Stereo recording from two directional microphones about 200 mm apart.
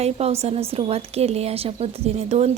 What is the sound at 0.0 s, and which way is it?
A woman's voice, 30° right (ahead or behind).